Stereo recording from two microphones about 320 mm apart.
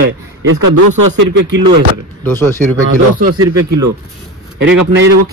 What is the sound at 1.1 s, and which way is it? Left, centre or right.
Speech, right.